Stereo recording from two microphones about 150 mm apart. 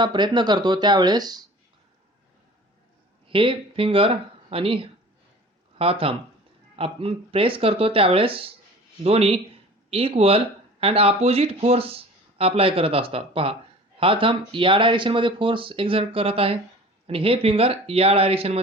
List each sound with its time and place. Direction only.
0.0 s speech: 30° right (ahead or behind)
3.2 s speech: 35° right (ahead or behind)